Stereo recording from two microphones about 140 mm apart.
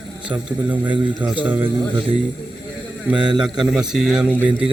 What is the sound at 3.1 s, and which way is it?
Speech, 35° right (ahead or behind).